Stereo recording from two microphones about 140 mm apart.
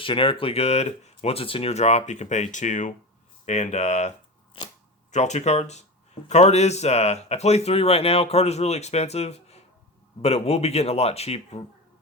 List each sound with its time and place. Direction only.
0.0 s speech: 40° left (ahead or behind)
5.1 s speech: 55° left (ahead or behind)